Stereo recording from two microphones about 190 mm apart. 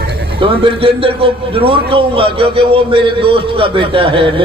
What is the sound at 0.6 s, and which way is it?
A man's voice, 30° right (ahead or behind).